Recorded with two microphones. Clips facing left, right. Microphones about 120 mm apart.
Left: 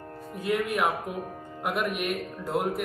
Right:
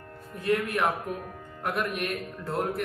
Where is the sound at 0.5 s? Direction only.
Centre (ahead or behind).